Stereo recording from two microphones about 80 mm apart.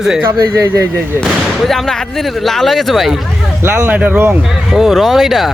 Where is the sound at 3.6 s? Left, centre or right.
Right.